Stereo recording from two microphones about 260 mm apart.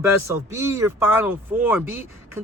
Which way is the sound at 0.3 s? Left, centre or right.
Centre.